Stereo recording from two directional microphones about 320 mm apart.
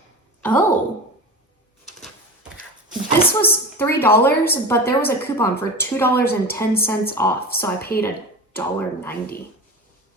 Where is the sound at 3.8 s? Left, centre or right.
Centre.